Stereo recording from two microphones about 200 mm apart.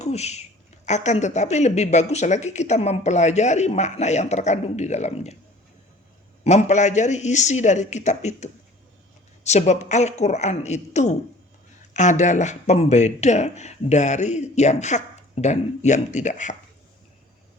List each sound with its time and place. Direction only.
0.0 s speech: 35° left (ahead or behind)
6.4 s speech: 35° left (ahead or behind)